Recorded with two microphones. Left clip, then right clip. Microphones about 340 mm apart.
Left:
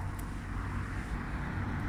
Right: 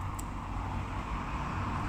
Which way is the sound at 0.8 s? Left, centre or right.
Centre.